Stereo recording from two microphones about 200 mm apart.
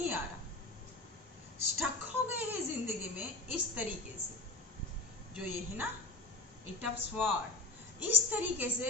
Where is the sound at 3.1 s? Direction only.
5° right (ahead or behind).